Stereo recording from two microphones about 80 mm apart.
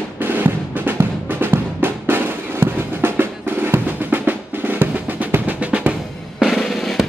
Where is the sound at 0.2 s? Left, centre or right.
Right.